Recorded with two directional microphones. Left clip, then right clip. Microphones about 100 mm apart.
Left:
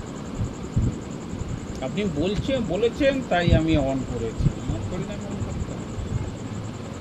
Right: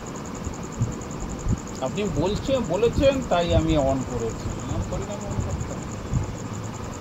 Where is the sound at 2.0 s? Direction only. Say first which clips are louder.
Left 1 dB; 30° right (ahead or behind).